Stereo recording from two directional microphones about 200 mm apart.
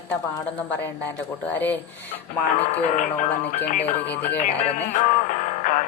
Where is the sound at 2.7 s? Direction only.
30° left (ahead or behind).